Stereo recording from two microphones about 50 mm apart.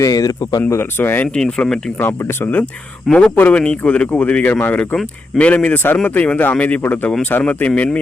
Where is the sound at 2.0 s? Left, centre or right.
Left.